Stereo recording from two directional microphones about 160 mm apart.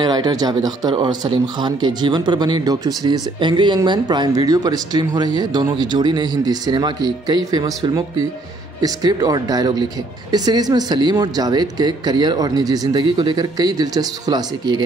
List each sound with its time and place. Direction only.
0.0 s speech: 25° right (ahead or behind)